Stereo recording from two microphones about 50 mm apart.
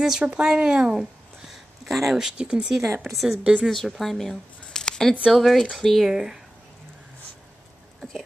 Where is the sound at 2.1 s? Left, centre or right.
Centre.